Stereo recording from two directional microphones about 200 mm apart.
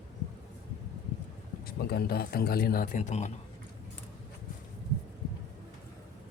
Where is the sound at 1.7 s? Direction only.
50° left (ahead or behind); by 3.3 s 35° left (ahead or behind).